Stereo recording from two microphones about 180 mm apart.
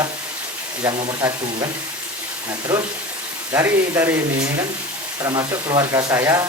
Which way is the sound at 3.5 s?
15° right (ahead or behind).